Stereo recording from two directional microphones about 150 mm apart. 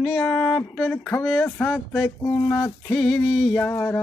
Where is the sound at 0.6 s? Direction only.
10° left (ahead or behind).